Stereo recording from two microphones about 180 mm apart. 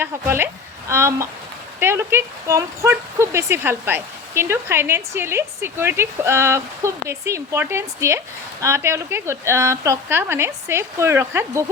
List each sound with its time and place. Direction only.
0.0 s speech: 15° right (ahead or behind)